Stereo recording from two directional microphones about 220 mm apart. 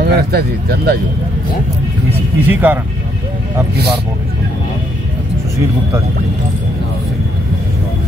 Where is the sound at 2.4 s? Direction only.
10° right (ahead or behind).